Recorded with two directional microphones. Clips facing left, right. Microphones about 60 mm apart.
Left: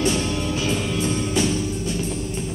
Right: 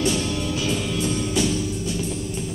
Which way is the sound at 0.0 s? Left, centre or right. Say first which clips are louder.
Left 1 dB; left.